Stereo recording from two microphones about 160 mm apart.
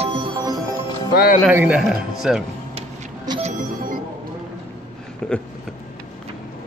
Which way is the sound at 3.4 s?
50° right (ahead or behind).